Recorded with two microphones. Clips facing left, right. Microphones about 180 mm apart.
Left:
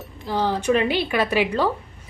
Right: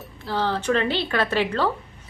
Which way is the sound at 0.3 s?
15° left (ahead or behind).